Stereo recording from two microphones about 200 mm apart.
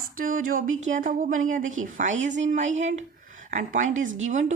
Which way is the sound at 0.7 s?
80° right.